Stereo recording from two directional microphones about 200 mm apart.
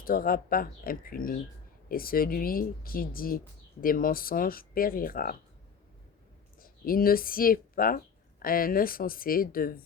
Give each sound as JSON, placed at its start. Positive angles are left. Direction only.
{"t": 0.0, "sound": "speech", "side_deg": 45}
{"t": 6.6, "sound": "speech", "side_deg": 45}